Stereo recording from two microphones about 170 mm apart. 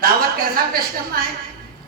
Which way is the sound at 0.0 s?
60° right (ahead or behind).